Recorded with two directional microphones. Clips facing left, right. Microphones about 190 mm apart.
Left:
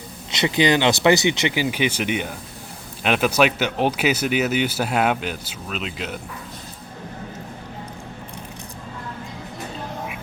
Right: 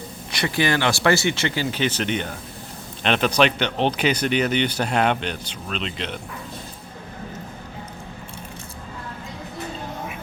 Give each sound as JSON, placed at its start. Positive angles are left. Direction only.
{"t": 0.3, "sound": "speech", "side_deg": 20}